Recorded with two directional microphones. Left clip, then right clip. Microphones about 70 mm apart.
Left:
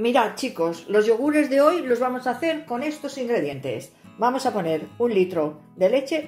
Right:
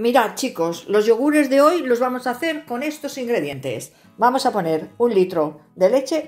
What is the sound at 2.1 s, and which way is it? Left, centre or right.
Speech, right.